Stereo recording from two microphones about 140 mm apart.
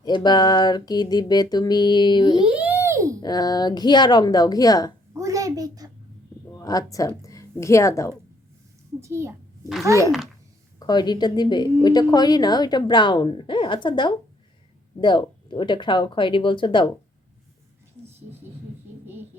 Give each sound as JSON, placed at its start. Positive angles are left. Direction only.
{"t": 0.0, "sound": "a woman's voice", "side_deg": 30}
{"t": 2.4, "sound": "a sound", "side_deg": -10}
{"t": 3.2, "sound": "a woman's voice", "side_deg": 30}
{"t": 5.1, "sound": "a sound", "side_deg": -25}
{"t": 6.5, "sound": "a woman's voice", "side_deg": 25}
{"t": 9.0, "sound": "a child's voice", "side_deg": -20}
{"t": 10.8, "sound": "a woman's voice", "side_deg": 30}